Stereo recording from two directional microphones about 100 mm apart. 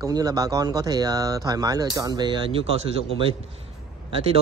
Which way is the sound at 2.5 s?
65° right (ahead or behind).